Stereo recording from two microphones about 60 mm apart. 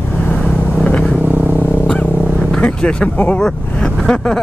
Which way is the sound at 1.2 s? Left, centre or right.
Right.